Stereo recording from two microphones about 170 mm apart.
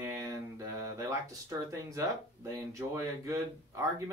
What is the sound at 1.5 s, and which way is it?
Speech, 20° right (ahead or behind).